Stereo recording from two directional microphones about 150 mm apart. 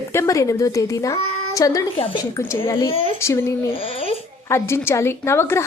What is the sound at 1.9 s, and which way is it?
Speech, 35° left (ahead or behind).